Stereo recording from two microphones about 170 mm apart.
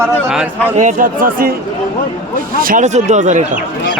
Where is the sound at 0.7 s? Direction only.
50° right (ahead or behind).